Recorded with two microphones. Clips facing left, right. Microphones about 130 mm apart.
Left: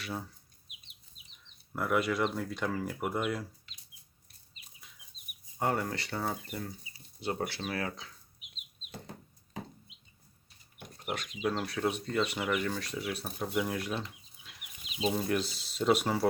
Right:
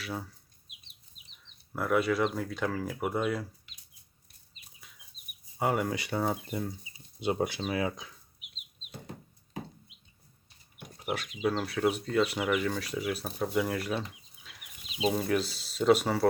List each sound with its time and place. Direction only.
0.0 s speech: centre (ahead or behind)
1.7 s speech: centre (ahead or behind)
5.5 s speech: 5° right (ahead or behind)
10.9 s speech: 5° right (ahead or behind)
13.2 s speech: 5° left (ahead or behind)
15.0 s speech: centre (ahead or behind)